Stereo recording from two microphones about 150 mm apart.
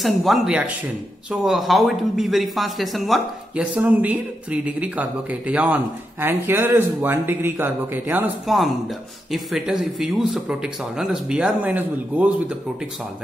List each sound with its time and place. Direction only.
0.0 s speech: centre (ahead or behind)
8.5 s speech: centre (ahead or behind)